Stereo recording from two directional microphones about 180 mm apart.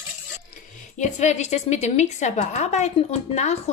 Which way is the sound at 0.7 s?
40° left (ahead or behind).